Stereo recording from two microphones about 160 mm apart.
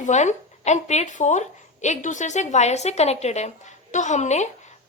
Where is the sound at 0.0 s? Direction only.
45° left (ahead or behind).